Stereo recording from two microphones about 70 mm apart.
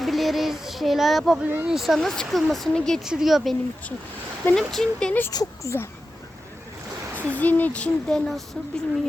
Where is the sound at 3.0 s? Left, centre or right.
Centre.